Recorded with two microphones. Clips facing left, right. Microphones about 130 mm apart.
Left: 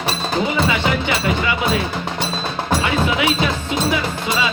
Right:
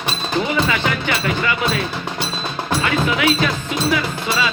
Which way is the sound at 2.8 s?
15° left (ahead or behind).